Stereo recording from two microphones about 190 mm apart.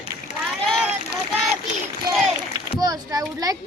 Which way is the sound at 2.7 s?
20° right (ahead or behind).